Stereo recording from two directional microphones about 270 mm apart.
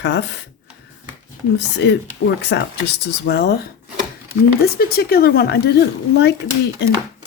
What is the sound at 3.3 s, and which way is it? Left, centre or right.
Speech, left.